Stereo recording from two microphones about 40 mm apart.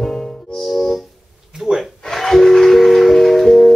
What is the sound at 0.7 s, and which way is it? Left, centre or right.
Music, centre.